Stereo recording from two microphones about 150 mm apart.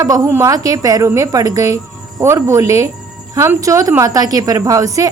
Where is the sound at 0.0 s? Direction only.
20° right (ahead or behind).